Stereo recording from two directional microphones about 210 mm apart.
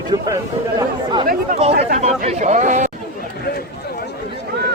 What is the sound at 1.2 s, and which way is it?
Speech, 40° right (ahead or behind).